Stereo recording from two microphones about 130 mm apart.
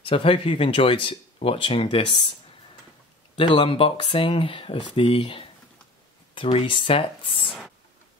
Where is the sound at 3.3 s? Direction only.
40° left (ahead or behind).